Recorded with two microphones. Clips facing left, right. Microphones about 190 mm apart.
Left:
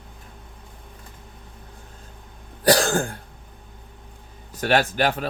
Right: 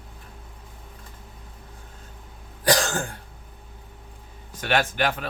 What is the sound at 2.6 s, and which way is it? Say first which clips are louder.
Cough: left 4 dB; 40° left (ahead or behind).